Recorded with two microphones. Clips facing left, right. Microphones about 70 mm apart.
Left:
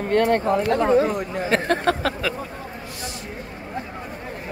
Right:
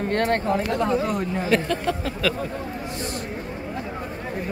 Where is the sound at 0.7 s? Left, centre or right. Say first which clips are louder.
Left 5 dB; left.